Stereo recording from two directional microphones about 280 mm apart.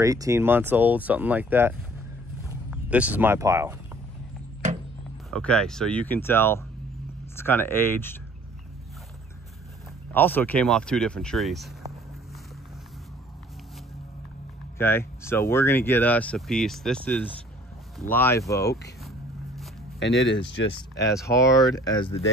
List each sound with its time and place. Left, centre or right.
0.0 s speech: centre
5.3 s speech: centre
10.1 s speech: centre
14.8 s speech: centre
19.6 s zipper: centre
20.3 s speech: left
21.0 s speech: centre